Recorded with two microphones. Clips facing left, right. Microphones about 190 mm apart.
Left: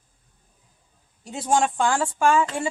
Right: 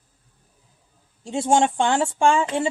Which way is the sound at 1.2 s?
25° right (ahead or behind).